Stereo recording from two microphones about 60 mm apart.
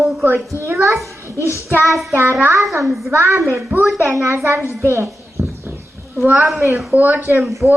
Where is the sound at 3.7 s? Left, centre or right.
Right.